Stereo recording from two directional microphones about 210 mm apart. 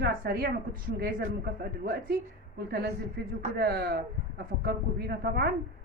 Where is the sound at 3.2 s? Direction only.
50° right (ahead or behind).